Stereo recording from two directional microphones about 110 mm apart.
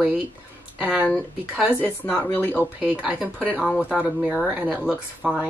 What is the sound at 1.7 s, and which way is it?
Speech, 15° left (ahead or behind).